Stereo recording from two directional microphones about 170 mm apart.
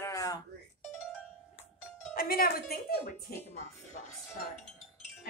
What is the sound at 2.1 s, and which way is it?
A woman's voice, 60° left (ahead or behind).